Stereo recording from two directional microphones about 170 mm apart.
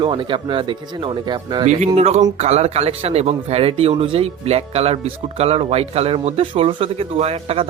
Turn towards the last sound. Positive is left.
turn(degrees=-35)  # may be behind; listen again after turning